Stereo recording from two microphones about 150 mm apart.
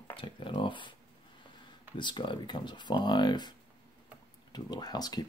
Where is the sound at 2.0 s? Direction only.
30° left (ahead or behind).